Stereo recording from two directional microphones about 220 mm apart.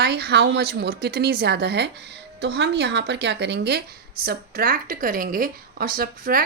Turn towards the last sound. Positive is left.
turn(degrees=-40)  # may be behind; listen again after turning